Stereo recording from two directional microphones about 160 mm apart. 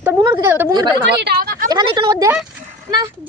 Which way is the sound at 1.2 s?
75° right (ahead or behind).